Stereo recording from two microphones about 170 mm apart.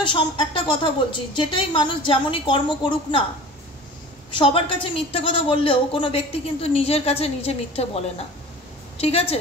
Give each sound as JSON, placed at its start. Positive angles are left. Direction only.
{"t": 0.1, "sound": "a woman's voice", "side_deg": 30}
{"t": 4.3, "sound": "a woman's voice", "side_deg": 30}